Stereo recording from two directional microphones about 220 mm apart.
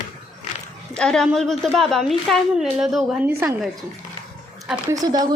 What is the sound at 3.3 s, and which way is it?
Speech, 10° right (ahead or behind).